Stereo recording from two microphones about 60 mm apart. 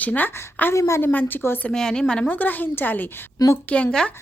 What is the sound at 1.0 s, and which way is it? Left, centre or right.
Speech, left.